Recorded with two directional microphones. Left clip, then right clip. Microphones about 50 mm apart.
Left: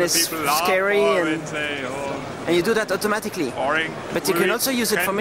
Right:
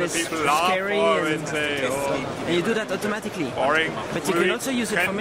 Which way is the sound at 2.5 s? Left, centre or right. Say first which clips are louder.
Left 5 dB; right.